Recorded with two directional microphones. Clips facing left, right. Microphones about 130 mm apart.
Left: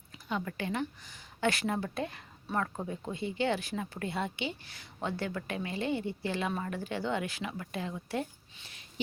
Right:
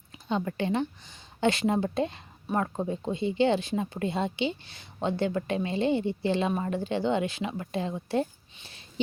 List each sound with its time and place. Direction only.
0.3 s speech: 25° right (ahead or behind)